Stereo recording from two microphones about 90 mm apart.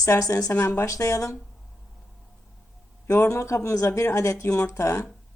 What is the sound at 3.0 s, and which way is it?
Speech, 35° left (ahead or behind).